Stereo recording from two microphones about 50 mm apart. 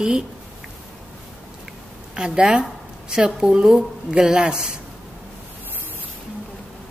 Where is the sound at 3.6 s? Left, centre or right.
Centre.